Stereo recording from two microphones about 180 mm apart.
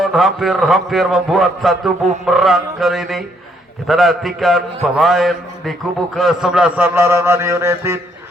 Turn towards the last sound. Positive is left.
turn(degrees=-15)  # may be behind; listen again after turning